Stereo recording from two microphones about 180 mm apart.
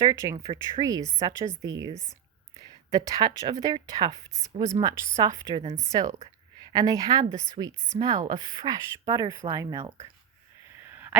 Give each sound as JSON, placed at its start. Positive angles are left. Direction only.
{"t": 0.0, "sound": "speech", "side_deg": -20}
{"t": 0.3, "sound": "speech", "side_deg": -30}
{"t": 1.9, "sound": "a woman's voice", "side_deg": 20}
{"t": 2.6, "sound": "speech", "side_deg": -20}
{"t": 7.7, "sound": "a woman's voice", "side_deg": 25}
{"t": 7.9, "sound": "speech", "side_deg": -25}
{"t": 10.8, "sound": "a sound", "side_deg": -10}